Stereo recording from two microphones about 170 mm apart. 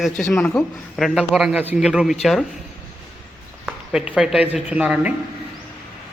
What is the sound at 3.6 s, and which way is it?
Speech, 5° right (ahead or behind).